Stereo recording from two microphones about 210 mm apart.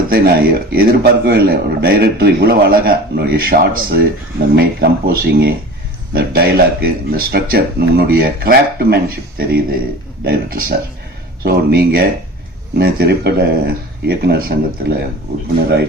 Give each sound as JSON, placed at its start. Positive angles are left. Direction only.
{"t": 0.1, "sound": "speech", "side_deg": -45}